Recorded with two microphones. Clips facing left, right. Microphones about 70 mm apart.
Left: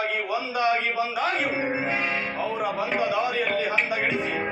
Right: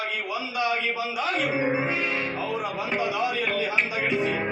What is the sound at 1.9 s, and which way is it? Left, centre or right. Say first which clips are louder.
Speech: even; left.